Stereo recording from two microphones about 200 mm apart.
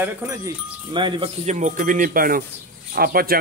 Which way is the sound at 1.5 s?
40° right (ahead or behind).